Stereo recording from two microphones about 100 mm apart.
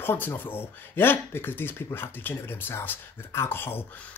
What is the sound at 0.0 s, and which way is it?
Speech, 20° left (ahead or behind).